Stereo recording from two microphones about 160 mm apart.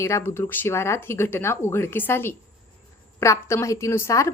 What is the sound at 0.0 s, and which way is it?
A woman's voice, 15° left (ahead or behind).